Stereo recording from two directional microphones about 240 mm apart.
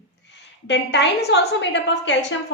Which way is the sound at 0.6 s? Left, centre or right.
Left.